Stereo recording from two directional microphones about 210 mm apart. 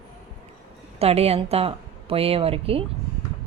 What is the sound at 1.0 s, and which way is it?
A woman's voice, 30° right (ahead or behind).